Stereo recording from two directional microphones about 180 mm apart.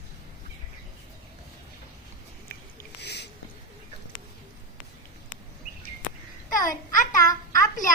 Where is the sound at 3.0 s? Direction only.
70° left (ahead or behind).